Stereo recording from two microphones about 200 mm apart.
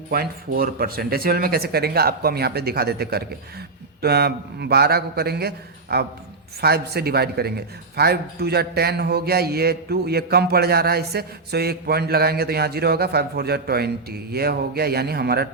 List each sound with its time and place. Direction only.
0.1 s a man's voice: 50° right (ahead or behind)